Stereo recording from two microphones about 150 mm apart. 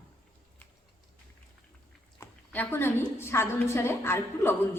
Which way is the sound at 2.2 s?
15° left (ahead or behind).